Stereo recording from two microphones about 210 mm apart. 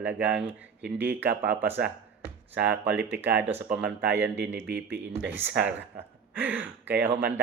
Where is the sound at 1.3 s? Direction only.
45° right (ahead or behind).